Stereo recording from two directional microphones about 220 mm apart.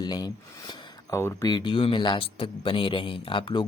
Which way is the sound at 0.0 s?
20° left (ahead or behind).